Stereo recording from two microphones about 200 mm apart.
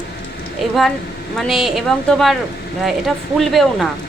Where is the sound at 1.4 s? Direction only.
Centre (ahead or behind).